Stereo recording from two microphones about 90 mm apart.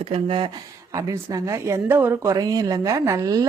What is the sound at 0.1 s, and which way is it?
Speech, 90° right.